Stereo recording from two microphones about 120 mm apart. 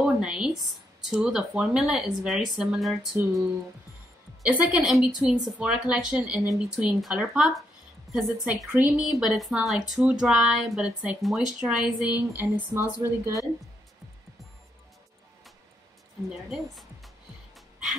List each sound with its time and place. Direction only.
0.0 s a sound: 5° right (ahead or behind)
1.1 s speech: 5° right (ahead or behind)
4.5 s a woman's voice: 15° right (ahead or behind)
8.7 s speech: 10° right (ahead or behind)
12.4 s a woman's voice: 20° right (ahead or behind)
16.4 s speech: centre (ahead or behind)
17.6 s music: 5° right (ahead or behind)